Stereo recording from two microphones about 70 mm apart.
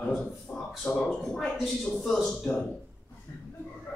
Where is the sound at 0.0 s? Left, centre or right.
Centre.